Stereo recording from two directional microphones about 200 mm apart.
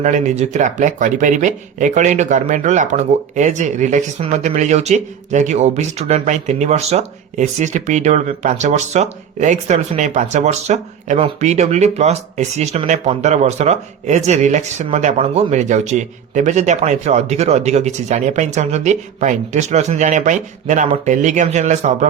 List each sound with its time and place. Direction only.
0.0 s speech: 35° right (ahead or behind)